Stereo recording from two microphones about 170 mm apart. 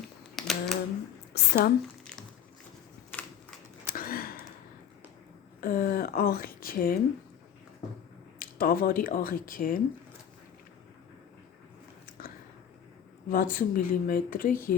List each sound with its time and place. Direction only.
0.3 s a sound: centre (ahead or behind)
1.3 s speech: 75° left (ahead or behind)
3.9 s a sound: 60° left (ahead or behind)
5.5 s speech: 55° left (ahead or behind)
8.4 s speech: 60° left (ahead or behind)
13.3 s speech: 55° left (ahead or behind)